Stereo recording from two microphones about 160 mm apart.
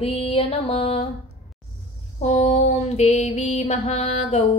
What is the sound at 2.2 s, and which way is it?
Mantra, 45° left (ahead or behind).